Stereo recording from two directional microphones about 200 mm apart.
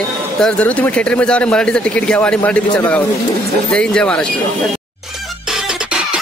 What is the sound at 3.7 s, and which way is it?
Speech, 5° left (ahead or behind).